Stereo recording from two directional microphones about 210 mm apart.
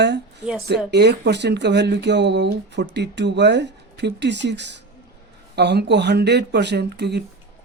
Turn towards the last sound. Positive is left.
turn(degrees=-50)  # may be behind; listen again after turning